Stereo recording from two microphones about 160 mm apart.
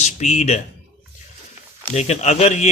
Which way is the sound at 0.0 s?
45° left (ahead or behind).